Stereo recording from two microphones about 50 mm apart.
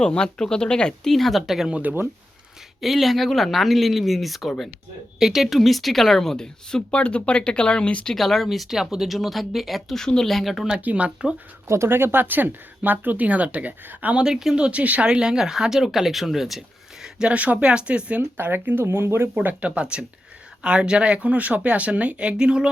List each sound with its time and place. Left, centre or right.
0.0 s speech: centre
1.1 s speech: centre
2.8 s speech: centre
6.9 s speech: left
8.1 s speech: centre
10.0 s speech: centre
10.8 s speech: right
11.7 s speech: right
14.1 s speech: centre
14.5 s speech: right
15.0 s speech: centre
17.2 s speech: right
18.4 s speech: right
19.4 s speech: right